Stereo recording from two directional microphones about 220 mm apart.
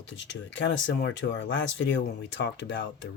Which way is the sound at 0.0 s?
55° left (ahead or behind).